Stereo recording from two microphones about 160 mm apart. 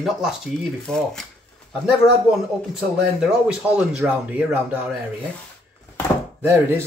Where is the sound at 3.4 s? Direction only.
5° right (ahead or behind).